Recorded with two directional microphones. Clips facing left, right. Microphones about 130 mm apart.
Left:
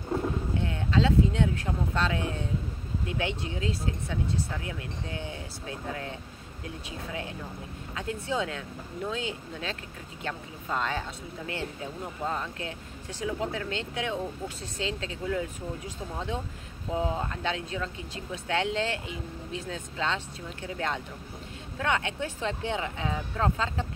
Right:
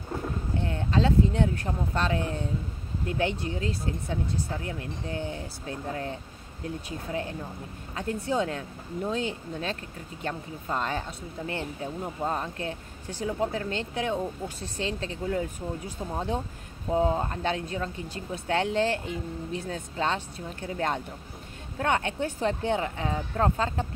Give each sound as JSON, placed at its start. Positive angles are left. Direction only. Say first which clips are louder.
{"t": 0.7, "sound": "speech", "louder": "right 1 dB", "side_deg": -40}
{"t": 16.9, "sound": "speech", "louder": "right 5 dB", "side_deg": -35}